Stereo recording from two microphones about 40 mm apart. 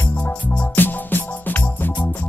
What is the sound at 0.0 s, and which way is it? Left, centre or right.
Music, left.